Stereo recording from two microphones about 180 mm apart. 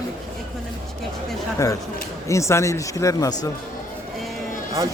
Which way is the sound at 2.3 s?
15° left (ahead or behind).